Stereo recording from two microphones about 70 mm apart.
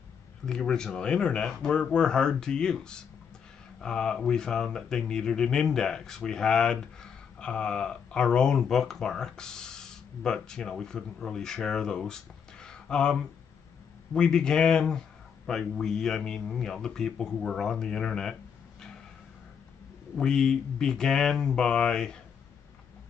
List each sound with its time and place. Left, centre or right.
0.5 s speech: centre
20.2 s speech: centre